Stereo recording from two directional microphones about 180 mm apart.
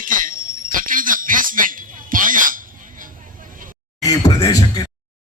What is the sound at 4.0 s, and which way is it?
Beatboxing, 20° left (ahead or behind).